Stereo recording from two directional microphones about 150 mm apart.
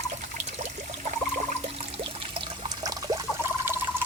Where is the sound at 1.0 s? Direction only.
55° right (ahead or behind).